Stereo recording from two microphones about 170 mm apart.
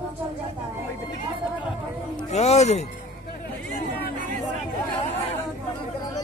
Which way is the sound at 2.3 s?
40° left (ahead or behind).